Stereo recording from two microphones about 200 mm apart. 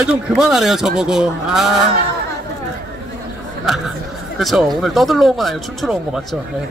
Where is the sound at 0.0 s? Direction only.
Centre (ahead or behind).